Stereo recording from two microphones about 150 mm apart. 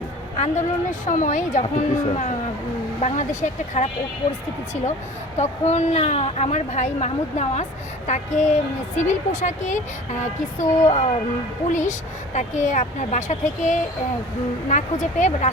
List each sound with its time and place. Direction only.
0.3 s a woman's voice: 50° left (ahead or behind)
5.4 s a woman's voice: 50° left (ahead or behind)